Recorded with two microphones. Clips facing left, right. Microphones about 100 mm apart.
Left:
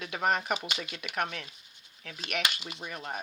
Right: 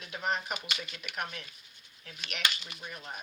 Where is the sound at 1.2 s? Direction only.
90° left.